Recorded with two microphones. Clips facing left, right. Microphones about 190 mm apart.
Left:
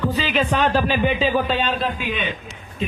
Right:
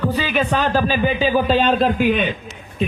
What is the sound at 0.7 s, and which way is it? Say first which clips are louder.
Speech: right 1 dB; 5° right (ahead or behind).